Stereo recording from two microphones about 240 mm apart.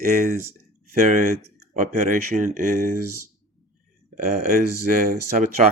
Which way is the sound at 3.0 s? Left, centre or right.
Right.